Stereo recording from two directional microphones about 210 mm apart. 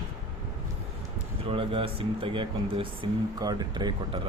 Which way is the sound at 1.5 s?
25° right (ahead or behind).